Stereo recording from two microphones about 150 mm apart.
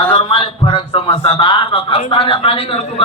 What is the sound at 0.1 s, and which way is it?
A man's voice, 35° left (ahead or behind).